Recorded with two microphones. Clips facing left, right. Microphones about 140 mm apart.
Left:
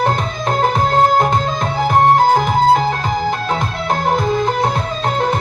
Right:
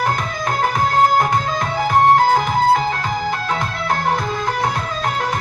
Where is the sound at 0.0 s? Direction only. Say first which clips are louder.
Left 3 dB; 25° left (ahead or behind).